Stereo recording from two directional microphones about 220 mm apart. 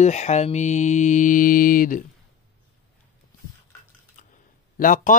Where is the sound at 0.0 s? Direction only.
30° left (ahead or behind).